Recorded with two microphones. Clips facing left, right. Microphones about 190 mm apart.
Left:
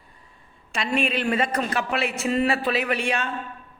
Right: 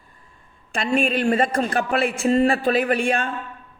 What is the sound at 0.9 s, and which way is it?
A man's voice, 50° right (ahead or behind).